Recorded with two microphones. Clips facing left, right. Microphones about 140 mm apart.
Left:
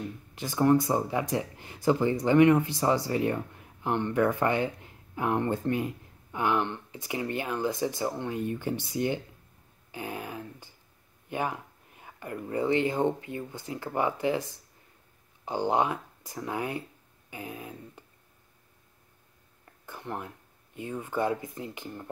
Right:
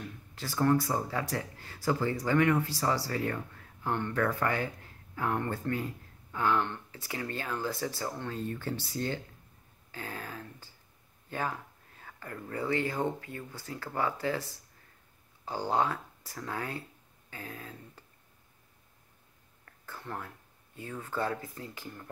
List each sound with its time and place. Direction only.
0.0 s speech: 20° left (ahead or behind)
9.8 s a sound: 15° left (ahead or behind)
11.2 s speech: 15° left (ahead or behind)
19.6 s speech: 15° left (ahead or behind)